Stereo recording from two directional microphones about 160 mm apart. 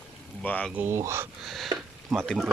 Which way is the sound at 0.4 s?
10° left (ahead or behind).